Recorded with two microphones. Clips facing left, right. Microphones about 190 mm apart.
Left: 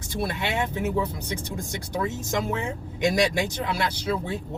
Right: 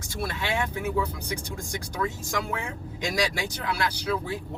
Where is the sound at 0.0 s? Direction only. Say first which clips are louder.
Left 3 dB; 20° left (ahead or behind).